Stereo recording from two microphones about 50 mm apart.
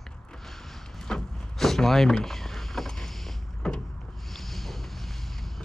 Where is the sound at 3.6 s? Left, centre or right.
Centre.